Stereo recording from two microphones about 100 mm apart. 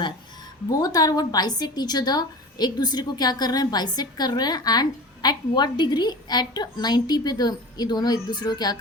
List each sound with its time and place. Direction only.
0.8 s a woman's voice: 40° left (ahead or behind)